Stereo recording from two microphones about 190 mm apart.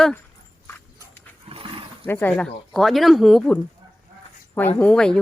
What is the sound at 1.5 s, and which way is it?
Roaring cats, 30° right (ahead or behind).